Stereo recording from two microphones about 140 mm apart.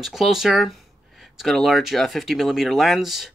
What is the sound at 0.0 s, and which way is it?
Speech, centre (ahead or behind).